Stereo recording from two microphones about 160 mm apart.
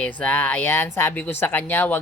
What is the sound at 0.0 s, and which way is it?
A woman's voice, 10° left (ahead or behind).